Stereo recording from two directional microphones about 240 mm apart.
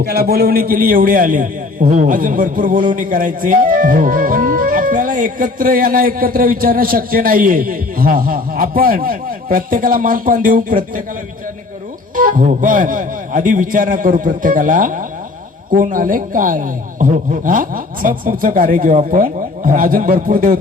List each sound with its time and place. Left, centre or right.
0.0 s a man's voice: right
12.1 s a man's voice: right